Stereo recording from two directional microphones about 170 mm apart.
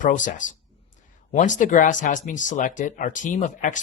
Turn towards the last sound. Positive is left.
turn(degrees=50)  # may be behind; listen again after turning